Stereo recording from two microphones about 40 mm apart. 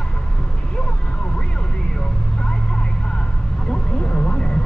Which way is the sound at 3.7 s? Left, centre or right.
Left.